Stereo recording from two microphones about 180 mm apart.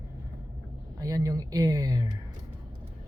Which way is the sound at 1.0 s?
20° right (ahead or behind).